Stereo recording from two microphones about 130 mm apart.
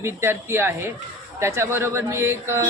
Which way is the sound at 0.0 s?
20° right (ahead or behind).